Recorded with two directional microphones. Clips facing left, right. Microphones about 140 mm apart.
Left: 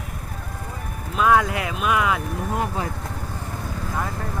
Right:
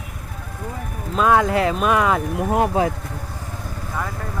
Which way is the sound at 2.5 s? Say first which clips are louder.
Right 8 dB; 90° right.